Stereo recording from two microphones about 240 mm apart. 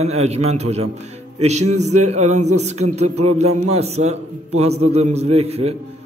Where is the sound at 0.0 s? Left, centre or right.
Right.